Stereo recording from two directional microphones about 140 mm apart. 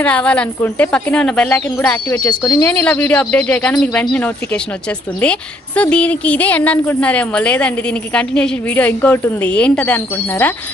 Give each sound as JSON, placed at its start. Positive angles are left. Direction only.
{"t": 0.0, "sound": "a woman's voice", "side_deg": 10}
{"t": 2.4, "sound": "speech", "side_deg": 25}
{"t": 2.7, "sound": "a woman's voice", "side_deg": 10}